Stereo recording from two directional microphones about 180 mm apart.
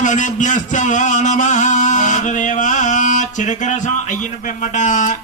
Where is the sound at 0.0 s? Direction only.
45° left (ahead or behind).